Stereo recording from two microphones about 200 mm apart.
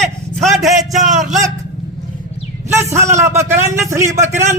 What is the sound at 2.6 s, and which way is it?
A man's voice, 15° right (ahead or behind).